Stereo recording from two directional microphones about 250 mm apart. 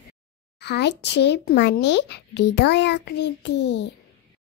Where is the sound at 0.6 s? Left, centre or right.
Left.